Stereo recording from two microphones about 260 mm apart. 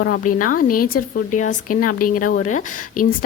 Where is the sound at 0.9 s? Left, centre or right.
Left.